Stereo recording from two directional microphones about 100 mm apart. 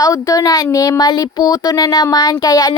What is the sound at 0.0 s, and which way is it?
Speech, 35° left (ahead or behind).